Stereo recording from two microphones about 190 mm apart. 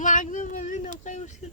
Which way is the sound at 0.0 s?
45° left (ahead or behind).